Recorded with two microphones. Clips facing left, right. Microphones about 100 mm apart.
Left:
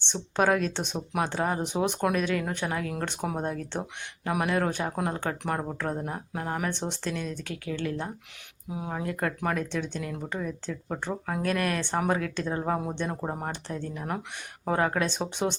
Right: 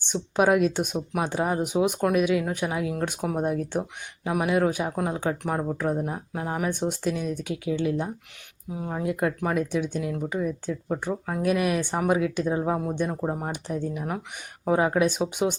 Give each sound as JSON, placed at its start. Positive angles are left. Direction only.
{"t": 0.0, "sound": "speech", "side_deg": -10}
{"t": 8.7, "sound": "speech", "side_deg": 5}
{"t": 9.4, "sound": "speech", "side_deg": -10}
{"t": 11.1, "sound": "speech", "side_deg": 0}
{"t": 11.4, "sound": "speech", "side_deg": -15}
{"t": 13.5, "sound": "speech", "side_deg": -15}